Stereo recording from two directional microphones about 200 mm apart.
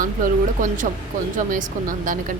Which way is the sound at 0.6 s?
40° right (ahead or behind).